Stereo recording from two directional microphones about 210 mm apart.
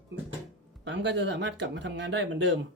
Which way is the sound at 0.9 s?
55° right (ahead or behind).